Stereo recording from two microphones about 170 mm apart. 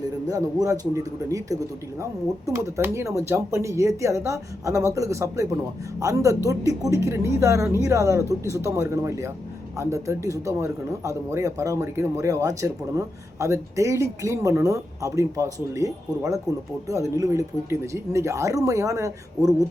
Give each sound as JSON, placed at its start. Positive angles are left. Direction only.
{"t": 0.3, "sound": "speech", "side_deg": -20}